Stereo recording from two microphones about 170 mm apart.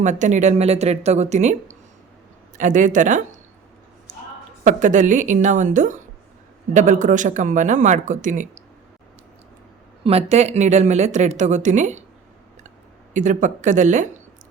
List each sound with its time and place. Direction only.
0.0 s speech: 45° right (ahead or behind)
4.6 s speech: 45° right (ahead or behind)
10.0 s speech: 35° right (ahead or behind)
13.1 s speech: 45° right (ahead or behind)